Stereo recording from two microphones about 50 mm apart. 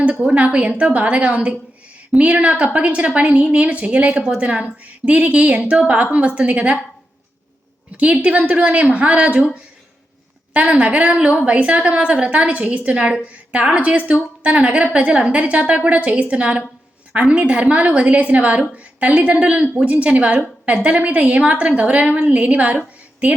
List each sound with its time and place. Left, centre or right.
0.3 s a woman's voice: right
7.9 s a woman's voice: right
10.5 s a woman's voice: right